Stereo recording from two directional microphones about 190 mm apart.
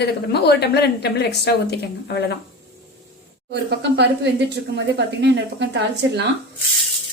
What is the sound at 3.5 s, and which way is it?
Speech, 60° right (ahead or behind).